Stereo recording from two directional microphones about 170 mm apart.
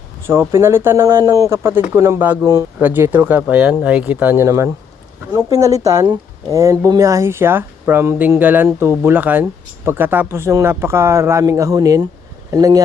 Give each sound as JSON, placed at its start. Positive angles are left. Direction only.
{"t": 0.3, "sound": "speech", "side_deg": -15}